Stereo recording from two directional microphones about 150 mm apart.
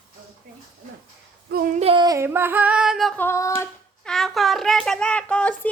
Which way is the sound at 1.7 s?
40° right (ahead or behind).